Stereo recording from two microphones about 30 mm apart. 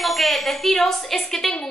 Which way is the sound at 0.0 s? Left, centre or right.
Centre.